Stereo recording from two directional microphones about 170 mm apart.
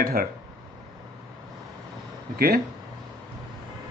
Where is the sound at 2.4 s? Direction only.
60° right (ahead or behind).